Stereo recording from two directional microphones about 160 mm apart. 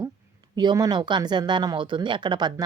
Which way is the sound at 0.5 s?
25° right (ahead or behind).